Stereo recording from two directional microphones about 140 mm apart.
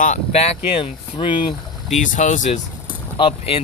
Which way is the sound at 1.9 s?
65° left (ahead or behind).